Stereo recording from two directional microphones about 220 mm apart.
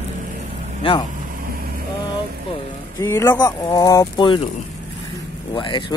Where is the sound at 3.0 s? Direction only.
10° left (ahead or behind).